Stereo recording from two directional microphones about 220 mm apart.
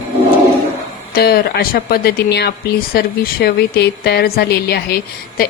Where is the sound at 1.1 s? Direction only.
45° left (ahead or behind).